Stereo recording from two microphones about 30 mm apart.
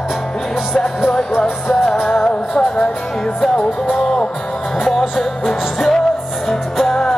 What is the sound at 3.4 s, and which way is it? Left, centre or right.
Music, centre.